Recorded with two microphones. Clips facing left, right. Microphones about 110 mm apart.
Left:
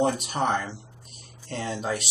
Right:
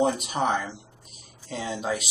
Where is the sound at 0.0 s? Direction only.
Centre (ahead or behind).